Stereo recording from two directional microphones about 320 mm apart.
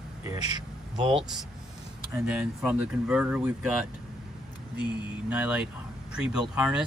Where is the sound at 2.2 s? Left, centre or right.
Centre.